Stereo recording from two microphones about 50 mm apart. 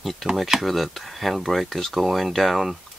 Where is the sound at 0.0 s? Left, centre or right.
Centre.